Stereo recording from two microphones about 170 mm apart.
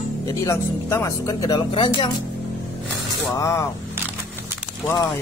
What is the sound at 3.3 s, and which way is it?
Speech, 20° left (ahead or behind).